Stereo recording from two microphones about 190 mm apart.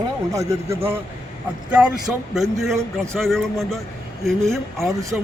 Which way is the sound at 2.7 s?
15° right (ahead or behind).